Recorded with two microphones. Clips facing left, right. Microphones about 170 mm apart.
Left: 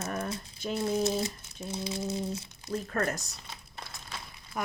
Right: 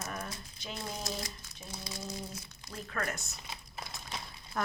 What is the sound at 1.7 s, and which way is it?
Speech, 25° left (ahead or behind).